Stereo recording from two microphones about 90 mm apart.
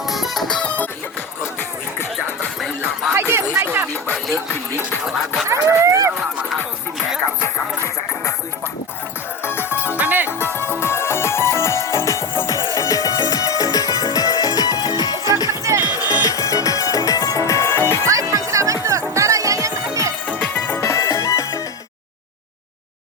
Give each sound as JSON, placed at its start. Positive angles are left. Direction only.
{"t": 0.1, "sound": "music", "side_deg": 0}
{"t": 3.1, "sound": "music", "side_deg": -30}
{"t": 5.0, "sound": "speech", "side_deg": 0}
{"t": 5.5, "sound": "dog", "side_deg": -35}
{"t": 7.0, "sound": "music", "side_deg": 0}
{"t": 9.4, "sound": "music", "side_deg": 25}
{"t": 9.7, "sound": "music", "side_deg": -20}
{"t": 10.8, "sound": "music", "side_deg": 30}
{"t": 15.4, "sound": "music", "side_deg": -35}
{"t": 16.2, "sound": "music", "side_deg": 40}
{"t": 18.0, "sound": "music", "side_deg": -35}
{"t": 20.5, "sound": "music", "side_deg": 25}